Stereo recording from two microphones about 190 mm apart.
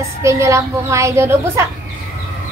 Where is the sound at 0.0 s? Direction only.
15° right (ahead or behind).